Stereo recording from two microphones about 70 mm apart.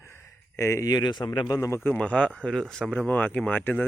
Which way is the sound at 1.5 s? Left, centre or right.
Left.